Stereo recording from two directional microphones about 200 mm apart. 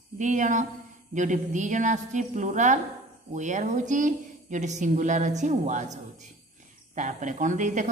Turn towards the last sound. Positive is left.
turn(degrees=-40)  # may be behind; listen again after turning